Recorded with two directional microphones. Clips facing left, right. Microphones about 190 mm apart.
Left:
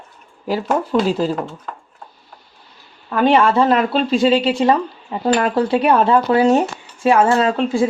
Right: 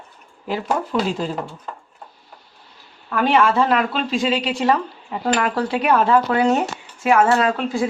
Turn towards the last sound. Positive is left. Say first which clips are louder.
# left 4 dB
turn(degrees=30)  # may be behind; listen again after turning